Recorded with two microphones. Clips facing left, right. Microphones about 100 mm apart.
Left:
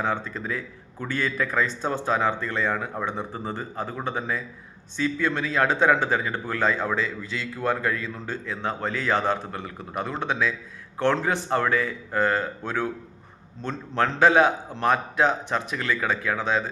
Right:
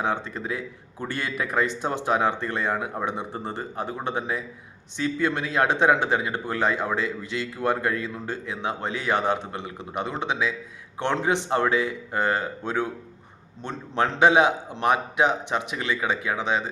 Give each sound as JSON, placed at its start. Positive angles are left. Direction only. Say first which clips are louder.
{"t": 0.0, "sound": "speech", "louder": "even", "side_deg": -20}